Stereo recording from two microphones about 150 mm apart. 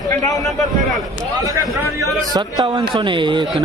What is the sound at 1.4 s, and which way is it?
A man's voice, 25° right (ahead or behind).